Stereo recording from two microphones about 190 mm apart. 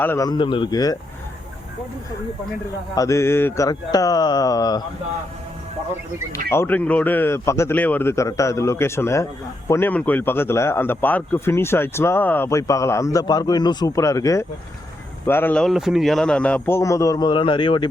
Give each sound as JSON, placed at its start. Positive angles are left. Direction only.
{"t": 0.0, "sound": "mantra", "side_deg": 15}
{"t": 2.9, "sound": "mantra", "side_deg": 15}
{"t": 6.5, "sound": "speech", "side_deg": 10}